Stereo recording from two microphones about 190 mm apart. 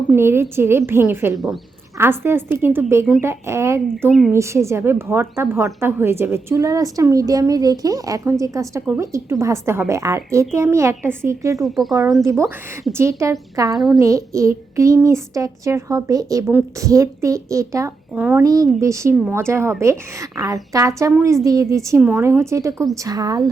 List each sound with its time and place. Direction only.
0.1 s speech: 10° right (ahead or behind)
11.6 s speech: centre (ahead or behind)
12.2 s speech: 15° right (ahead or behind)